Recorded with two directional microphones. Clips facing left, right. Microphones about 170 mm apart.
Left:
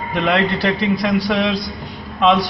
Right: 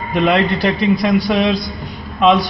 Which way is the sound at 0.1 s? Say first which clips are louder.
Right 3 dB; 15° right (ahead or behind).